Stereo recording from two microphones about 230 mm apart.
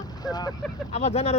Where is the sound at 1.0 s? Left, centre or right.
Left.